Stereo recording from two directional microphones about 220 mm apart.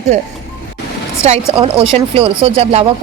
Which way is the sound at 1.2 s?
25° right (ahead or behind).